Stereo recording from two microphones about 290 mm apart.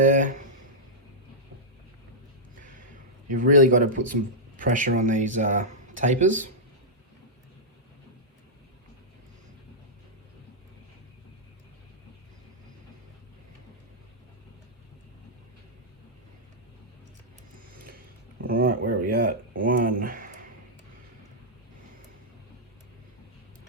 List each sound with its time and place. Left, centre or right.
0.0 s speech: right
3.2 s speech: right
17.7 s a sound: right